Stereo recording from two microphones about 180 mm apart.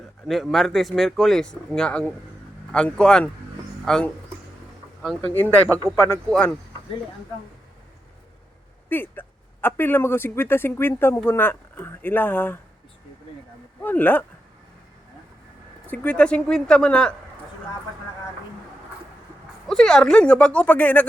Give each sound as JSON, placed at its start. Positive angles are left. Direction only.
{"t": 0.3, "sound": "a man's voice", "side_deg": 0}
{"t": 5.6, "sound": "speech", "side_deg": -15}
{"t": 8.9, "sound": "a man's voice", "side_deg": 10}
{"t": 13.8, "sound": "a man's voice", "side_deg": 10}
{"t": 15.9, "sound": "speech", "side_deg": 5}
{"t": 19.6, "sound": "speech", "side_deg": 5}